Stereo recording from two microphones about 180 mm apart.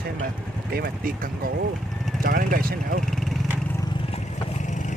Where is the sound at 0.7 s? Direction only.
55° right (ahead or behind).